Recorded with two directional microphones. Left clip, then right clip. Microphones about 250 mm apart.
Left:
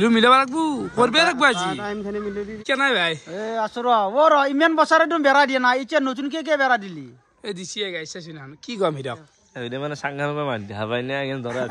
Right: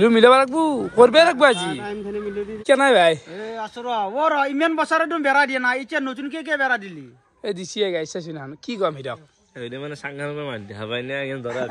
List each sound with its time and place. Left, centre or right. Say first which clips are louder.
0.0 s a man's voice: right 2 dB; centre
3.3 s a man's voice: left 5 dB; centre
7.4 s a man's voice: right 5 dB; centre
9.7 s a man's voice: left 5 dB; left